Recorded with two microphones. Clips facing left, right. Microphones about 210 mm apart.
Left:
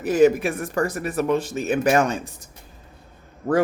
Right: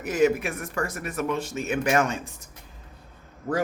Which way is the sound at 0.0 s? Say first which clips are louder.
Left 5 dB; 35° left (ahead or behind).